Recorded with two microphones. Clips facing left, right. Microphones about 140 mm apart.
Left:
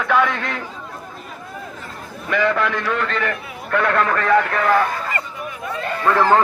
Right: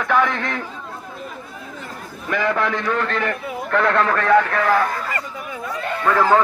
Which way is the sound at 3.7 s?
5° left (ahead or behind).